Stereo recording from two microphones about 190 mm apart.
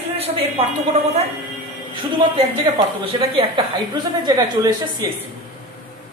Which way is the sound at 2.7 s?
30° right (ahead or behind).